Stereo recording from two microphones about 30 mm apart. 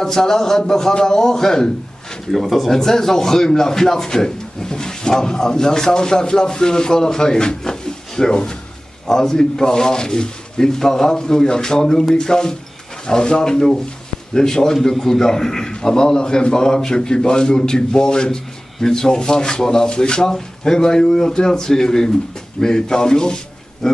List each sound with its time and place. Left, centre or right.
0.0 s a man's voice: centre
2.3 s a man's voice: centre
15.7 s a man's voice: left